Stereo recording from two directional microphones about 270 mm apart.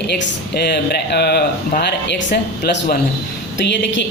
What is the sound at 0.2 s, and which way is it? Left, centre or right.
Speech, left.